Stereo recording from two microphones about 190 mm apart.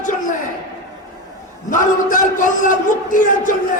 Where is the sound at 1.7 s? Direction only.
45° left (ahead or behind).